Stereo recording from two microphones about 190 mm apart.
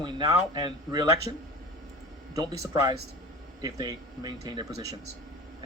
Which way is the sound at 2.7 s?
20° right (ahead or behind).